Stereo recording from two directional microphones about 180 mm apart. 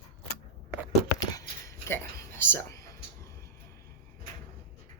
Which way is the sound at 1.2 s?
20° left (ahead or behind).